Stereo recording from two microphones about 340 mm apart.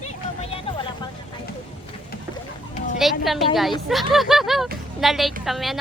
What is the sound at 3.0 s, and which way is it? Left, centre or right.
Speech, centre.